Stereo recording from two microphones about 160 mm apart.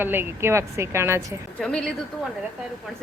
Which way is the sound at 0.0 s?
15° right (ahead or behind).